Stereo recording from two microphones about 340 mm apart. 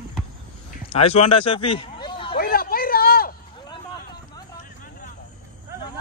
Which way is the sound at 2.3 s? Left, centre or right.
Left.